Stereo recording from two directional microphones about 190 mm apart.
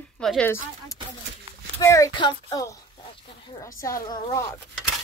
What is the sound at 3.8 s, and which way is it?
Speech, 15° left (ahead or behind).